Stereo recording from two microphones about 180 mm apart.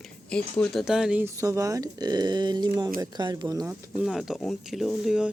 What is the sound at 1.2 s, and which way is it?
Speech, 15° right (ahead or behind).